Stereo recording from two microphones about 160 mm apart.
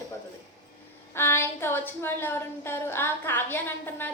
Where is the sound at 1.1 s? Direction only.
15° left (ahead or behind).